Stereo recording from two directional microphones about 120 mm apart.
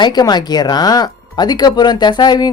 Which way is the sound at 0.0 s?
35° left (ahead or behind).